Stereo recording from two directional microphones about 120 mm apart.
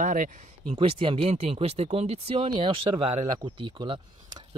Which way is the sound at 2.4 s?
45° right (ahead or behind).